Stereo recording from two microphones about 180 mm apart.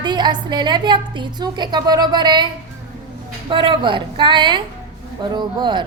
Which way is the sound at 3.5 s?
25° right (ahead or behind).